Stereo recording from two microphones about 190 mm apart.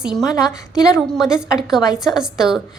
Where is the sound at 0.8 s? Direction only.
20° left (ahead or behind).